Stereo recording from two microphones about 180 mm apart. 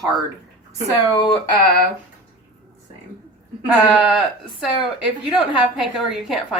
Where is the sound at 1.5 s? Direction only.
60° left (ahead or behind).